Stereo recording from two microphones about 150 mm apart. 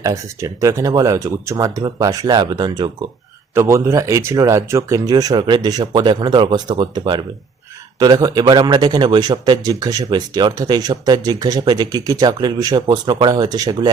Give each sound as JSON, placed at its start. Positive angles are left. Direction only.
{"t": 0.0, "sound": "a man's voice", "side_deg": -20}
{"t": 3.5, "sound": "a man's voice", "side_deg": -20}